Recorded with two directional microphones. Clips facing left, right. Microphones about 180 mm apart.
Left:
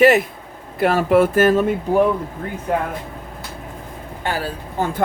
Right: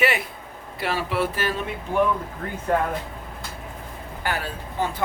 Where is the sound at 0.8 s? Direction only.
50° left (ahead or behind).